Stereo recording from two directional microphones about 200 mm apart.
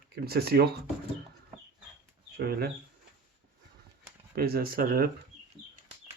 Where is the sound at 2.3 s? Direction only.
50° right (ahead or behind).